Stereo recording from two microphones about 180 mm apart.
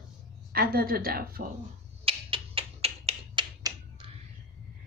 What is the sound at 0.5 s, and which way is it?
Speech, 55° right (ahead or behind).